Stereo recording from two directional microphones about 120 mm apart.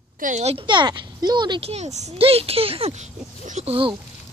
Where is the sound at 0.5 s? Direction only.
40° right (ahead or behind).